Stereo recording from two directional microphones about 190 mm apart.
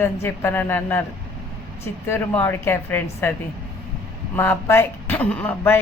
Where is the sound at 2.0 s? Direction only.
10° left (ahead or behind).